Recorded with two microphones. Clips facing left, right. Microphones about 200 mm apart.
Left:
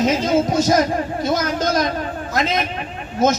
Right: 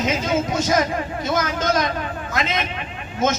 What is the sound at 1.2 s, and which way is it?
Speech, 35° left (ahead or behind).